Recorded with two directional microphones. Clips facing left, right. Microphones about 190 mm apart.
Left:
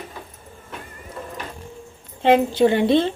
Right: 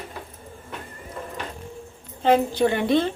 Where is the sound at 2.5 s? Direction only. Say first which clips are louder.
Left 4 dB; 20° left (ahead or behind).